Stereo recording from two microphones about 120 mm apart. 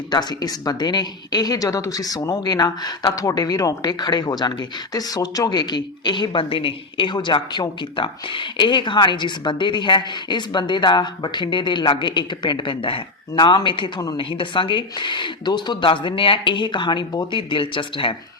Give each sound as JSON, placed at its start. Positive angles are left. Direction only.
{"t": 0.1, "sound": "a woman's voice", "side_deg": 35}